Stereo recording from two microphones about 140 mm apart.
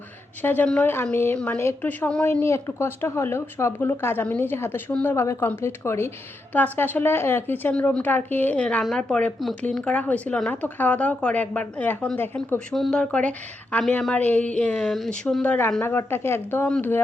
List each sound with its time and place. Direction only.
0.4 s speech: 10° left (ahead or behind)